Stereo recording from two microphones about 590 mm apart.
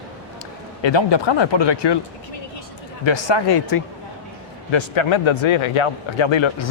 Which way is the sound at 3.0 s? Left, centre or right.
Left.